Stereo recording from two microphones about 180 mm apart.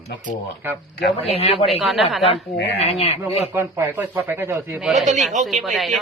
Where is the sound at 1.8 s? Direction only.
Centre (ahead or behind).